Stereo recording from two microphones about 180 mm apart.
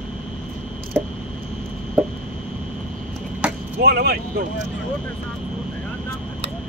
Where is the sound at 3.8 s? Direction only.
60° right (ahead or behind).